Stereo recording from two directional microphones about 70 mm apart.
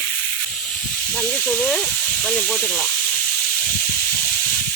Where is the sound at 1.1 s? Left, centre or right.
Centre.